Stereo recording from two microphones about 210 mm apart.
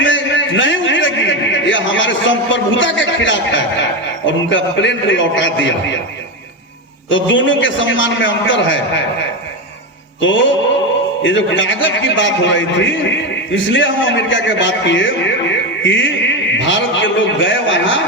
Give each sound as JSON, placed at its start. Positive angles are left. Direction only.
{"t": 0.0, "sound": "a sound", "side_deg": 60}
{"t": 4.3, "sound": "a man's voice", "side_deg": 60}
{"t": 7.1, "sound": "a man's voice", "side_deg": 65}
{"t": 10.2, "sound": "a man's voice", "side_deg": 65}